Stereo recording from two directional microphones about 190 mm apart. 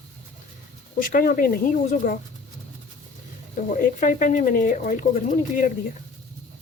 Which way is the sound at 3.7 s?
45° left (ahead or behind).